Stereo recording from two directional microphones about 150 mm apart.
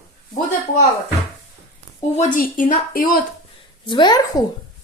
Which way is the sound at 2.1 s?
50° left (ahead or behind).